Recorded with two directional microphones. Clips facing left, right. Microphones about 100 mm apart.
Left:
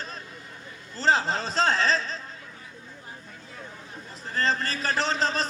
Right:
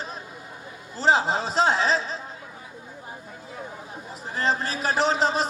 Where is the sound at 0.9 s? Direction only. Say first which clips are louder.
Right 3 dB; 10° right (ahead or behind).